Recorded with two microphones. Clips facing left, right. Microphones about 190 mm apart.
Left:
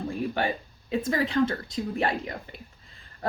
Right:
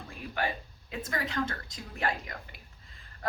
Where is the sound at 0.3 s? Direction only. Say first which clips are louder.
Left 5 dB; 30° left (ahead or behind).